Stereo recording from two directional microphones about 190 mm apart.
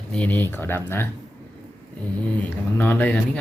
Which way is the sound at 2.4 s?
10° left (ahead or behind).